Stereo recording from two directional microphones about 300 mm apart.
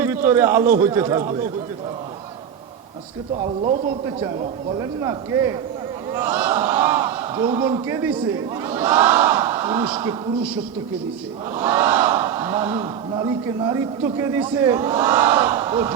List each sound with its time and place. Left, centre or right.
0.0 s a man's voice: centre
3.4 s a man's voice: centre
4.8 s a man's voice: centre
11.5 s speech: centre